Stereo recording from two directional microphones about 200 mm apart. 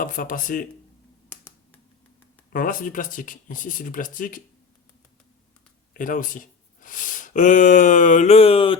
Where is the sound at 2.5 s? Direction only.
45° left (ahead or behind).